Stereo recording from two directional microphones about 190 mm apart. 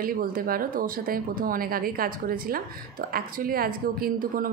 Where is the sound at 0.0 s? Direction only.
50° right (ahead or behind).